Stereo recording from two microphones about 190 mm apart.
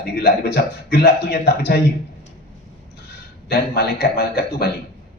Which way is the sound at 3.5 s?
55° left (ahead or behind).